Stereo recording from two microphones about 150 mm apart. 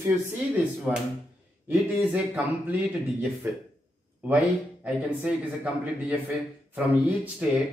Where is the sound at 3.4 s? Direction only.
15° right (ahead or behind).